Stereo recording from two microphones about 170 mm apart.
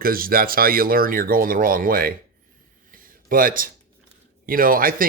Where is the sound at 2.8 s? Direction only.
55° right (ahead or behind).